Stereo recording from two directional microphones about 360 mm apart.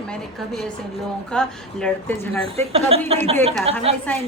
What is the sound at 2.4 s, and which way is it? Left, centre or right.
Speech, centre.